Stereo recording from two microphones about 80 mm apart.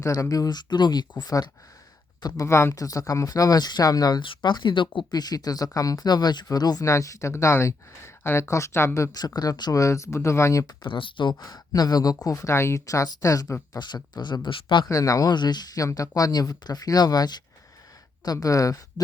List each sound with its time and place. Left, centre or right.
0.0 s speech: left
2.2 s speech: left
6.8 s speech: left
9.1 s speech: left
9.8 s speech: left
10.8 s speech: left
13.7 s speech: left
14.8 s speech: left
15.3 s speech: left